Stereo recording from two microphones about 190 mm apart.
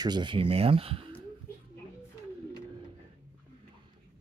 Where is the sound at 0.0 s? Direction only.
25° right (ahead or behind).